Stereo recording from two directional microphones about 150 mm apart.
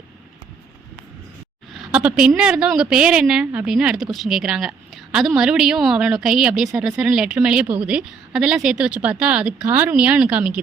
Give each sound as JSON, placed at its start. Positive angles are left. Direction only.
{"t": 1.7, "sound": "a woman's voice", "side_deg": -5}